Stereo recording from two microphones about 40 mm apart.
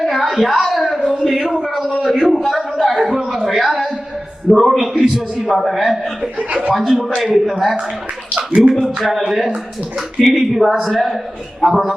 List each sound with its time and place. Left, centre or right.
0.0 s a sound: centre
4.5 s a man's voice: centre
6.5 s speech: right
6.7 s a man's voice: centre